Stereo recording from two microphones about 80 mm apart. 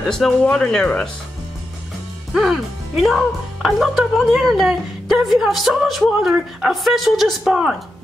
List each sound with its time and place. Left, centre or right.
0.0 s speech: centre
2.3 s speech: centre